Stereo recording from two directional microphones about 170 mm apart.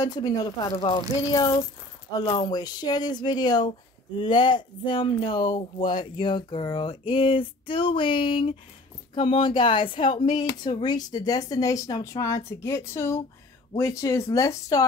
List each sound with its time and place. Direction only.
0.0 s speech: 20° left (ahead or behind)
6.1 s a sound: 30° left (ahead or behind)
9.1 s speech: 30° left (ahead or behind)